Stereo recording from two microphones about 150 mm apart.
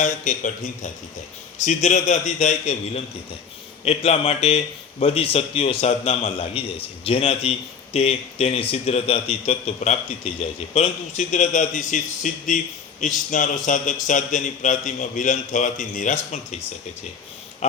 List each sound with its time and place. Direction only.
0.0 s a man's voice: 55° left (ahead or behind)
10.8 s a man's voice: 50° left (ahead or behind)
17.6 s a sound: 45° left (ahead or behind)